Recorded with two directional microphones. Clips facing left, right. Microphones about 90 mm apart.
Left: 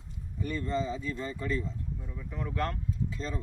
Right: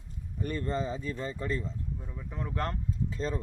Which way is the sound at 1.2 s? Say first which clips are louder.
Left 1 dB; 35° right (ahead or behind).